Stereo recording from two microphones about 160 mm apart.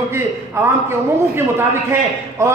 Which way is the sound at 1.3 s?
15° right (ahead or behind).